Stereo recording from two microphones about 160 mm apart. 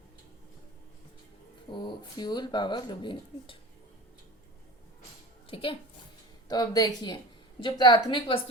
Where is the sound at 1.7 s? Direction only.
30° left (ahead or behind).